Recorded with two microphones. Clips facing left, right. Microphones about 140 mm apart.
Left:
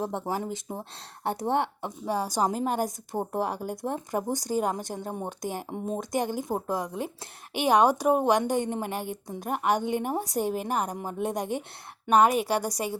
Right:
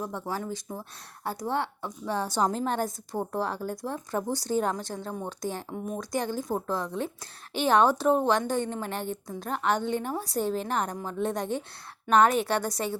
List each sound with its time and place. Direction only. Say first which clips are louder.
0.3 s speech: left 2 dB; 20° left (ahead or behind)
5.6 s speech: left 2 dB; 25° left (ahead or behind)